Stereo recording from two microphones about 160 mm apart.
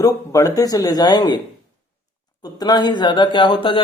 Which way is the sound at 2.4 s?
25° left (ahead or behind).